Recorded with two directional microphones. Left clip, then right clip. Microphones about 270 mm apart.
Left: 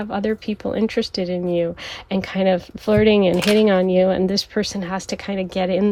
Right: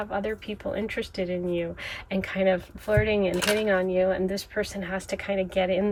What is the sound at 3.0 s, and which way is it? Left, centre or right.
Speech, left.